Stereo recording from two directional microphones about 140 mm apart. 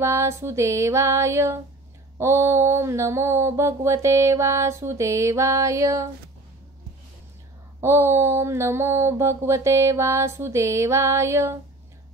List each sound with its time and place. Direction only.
0.0 s mantra: 20° right (ahead or behind)
7.8 s mantra: 20° right (ahead or behind)